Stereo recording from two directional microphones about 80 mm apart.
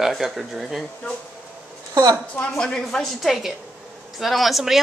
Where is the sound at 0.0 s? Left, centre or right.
Centre.